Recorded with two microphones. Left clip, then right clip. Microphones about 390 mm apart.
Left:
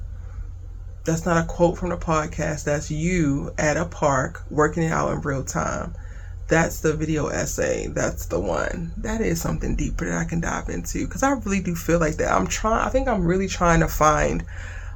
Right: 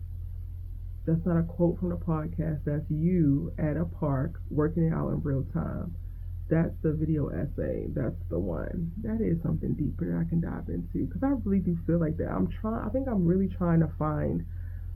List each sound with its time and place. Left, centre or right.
1.0 s speech: centre